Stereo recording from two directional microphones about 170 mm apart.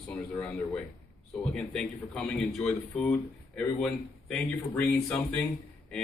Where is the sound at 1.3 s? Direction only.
5° left (ahead or behind).